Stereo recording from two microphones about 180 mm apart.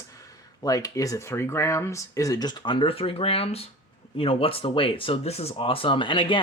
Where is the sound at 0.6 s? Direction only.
20° left (ahead or behind).